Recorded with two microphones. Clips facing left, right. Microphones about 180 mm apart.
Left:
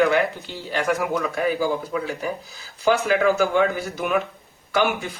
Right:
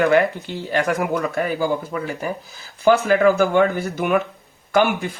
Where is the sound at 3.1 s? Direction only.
55° right (ahead or behind).